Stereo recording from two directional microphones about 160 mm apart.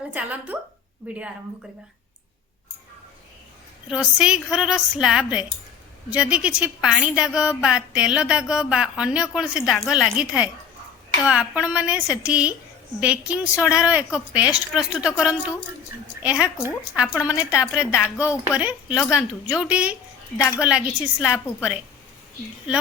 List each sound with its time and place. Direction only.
0.1 s a woman's voice: 10° right (ahead or behind)
3.8 s a woman's voice: 5° right (ahead or behind)
18.9 s a woman's voice: 20° left (ahead or behind)
19.5 s a woman's voice: 10° right (ahead or behind)